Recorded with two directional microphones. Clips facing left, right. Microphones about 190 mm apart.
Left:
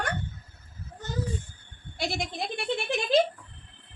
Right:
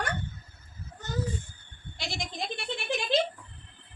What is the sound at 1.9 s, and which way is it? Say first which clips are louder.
Speech: left 5 dB; 60° left (ahead or behind).